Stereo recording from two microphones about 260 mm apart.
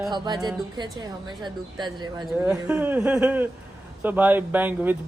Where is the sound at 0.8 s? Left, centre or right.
Centre.